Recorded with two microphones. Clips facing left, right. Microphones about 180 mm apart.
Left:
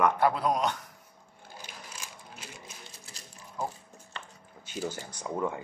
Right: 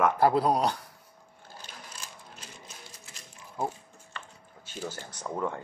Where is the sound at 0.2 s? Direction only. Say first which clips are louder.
Right 3 dB; 35° right (ahead or behind).